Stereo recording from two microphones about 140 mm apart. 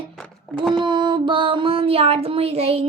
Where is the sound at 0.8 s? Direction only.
35° right (ahead or behind).